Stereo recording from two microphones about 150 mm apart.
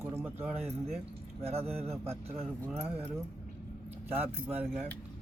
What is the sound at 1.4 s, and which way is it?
Speech, 40° right (ahead or behind).